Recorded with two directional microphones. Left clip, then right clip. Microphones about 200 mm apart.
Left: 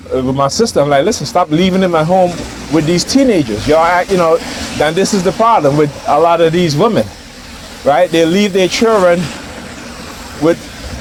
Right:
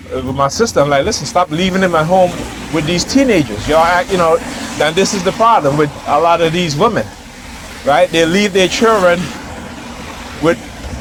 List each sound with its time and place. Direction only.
0.2 s speech: 65° left (ahead or behind)
10.4 s speech: 65° left (ahead or behind)